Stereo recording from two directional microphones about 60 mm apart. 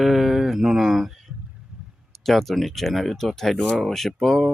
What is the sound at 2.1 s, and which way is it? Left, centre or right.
Speech, centre.